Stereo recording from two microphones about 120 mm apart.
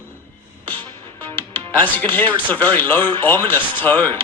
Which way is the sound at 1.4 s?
15° left (ahead or behind).